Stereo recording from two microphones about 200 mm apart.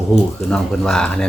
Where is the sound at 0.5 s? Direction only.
5° left (ahead or behind).